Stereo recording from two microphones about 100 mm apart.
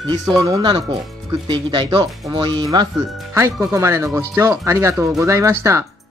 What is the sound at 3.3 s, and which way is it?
Speech, 25° right (ahead or behind).